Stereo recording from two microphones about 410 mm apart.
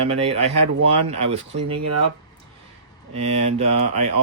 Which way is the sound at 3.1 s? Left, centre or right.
Centre.